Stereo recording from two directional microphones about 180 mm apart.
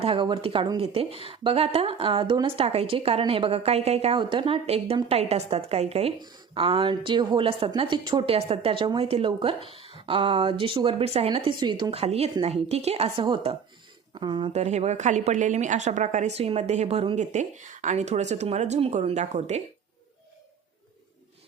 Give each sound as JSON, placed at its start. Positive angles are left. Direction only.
{"t": 0.0, "sound": "a woman's voice", "side_deg": -30}
{"t": 9.7, "sound": "a sound", "side_deg": 35}
{"t": 10.1, "sound": "a woman's voice", "side_deg": -30}